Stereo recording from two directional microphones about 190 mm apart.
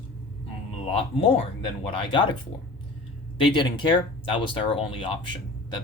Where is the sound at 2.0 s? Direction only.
25° left (ahead or behind).